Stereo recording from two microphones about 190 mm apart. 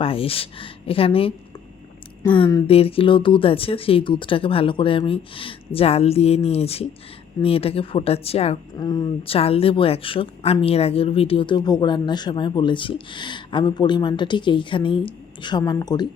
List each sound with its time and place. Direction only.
0.0 s a woman's voice: 30° left (ahead or behind)
2.2 s speech: 15° left (ahead or behind)
2.6 s a woman's voice: 30° left (ahead or behind)
8.8 s a woman's voice: 20° left (ahead or behind)